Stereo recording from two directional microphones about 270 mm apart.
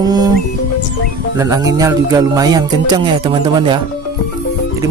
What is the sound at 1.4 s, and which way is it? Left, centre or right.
Music, centre.